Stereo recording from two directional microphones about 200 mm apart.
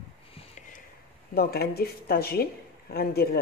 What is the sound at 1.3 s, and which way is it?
Speech, 50° left (ahead or behind).